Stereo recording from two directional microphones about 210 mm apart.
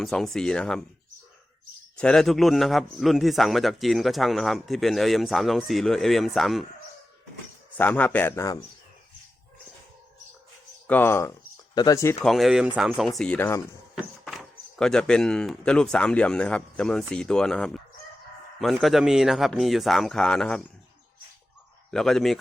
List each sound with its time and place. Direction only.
0.0 s a man's voice: centre (ahead or behind)
2.0 s a man's voice: 5° left (ahead or behind)
7.7 s a man's voice: 10° left (ahead or behind)
10.8 s speech: 10° left (ahead or behind)
12.2 s a man's voice: centre (ahead or behind)
13.9 s a man's voice: centre (ahead or behind)
21.9 s a man's voice: centre (ahead or behind)